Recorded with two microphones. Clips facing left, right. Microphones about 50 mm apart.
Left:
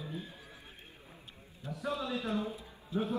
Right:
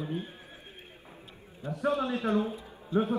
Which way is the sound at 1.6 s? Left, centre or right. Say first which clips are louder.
Right 7 dB; right.